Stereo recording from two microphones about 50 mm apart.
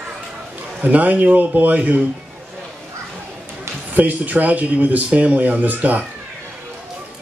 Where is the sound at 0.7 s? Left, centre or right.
Right.